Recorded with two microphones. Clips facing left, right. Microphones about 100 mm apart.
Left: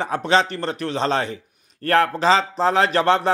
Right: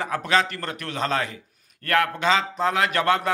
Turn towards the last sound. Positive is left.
turn(degrees=30)  # may be behind; listen again after turning